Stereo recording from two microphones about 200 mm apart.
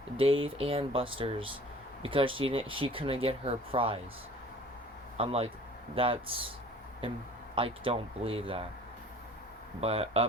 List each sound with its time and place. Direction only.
0.4 s speech: 25° right (ahead or behind)
5.1 s speech: 30° right (ahead or behind)
7.5 s speech: 25° right (ahead or behind)
9.8 s speech: 30° right (ahead or behind)